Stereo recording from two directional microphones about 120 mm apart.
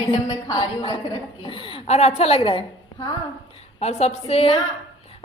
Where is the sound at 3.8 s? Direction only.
65° left (ahead or behind).